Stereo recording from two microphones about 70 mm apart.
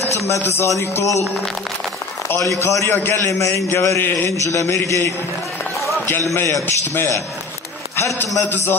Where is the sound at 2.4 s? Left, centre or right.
Left.